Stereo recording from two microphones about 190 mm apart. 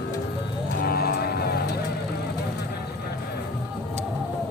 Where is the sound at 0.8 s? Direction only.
55° left (ahead or behind).